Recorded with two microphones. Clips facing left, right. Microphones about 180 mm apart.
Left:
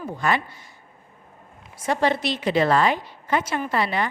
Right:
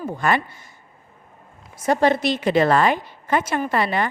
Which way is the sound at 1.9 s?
45° right (ahead or behind).